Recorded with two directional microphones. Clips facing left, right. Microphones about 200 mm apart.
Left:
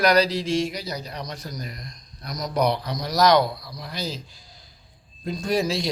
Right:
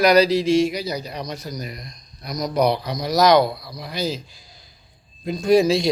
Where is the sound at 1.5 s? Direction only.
20° right (ahead or behind).